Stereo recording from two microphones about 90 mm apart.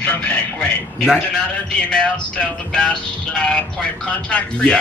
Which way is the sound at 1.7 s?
10° left (ahead or behind).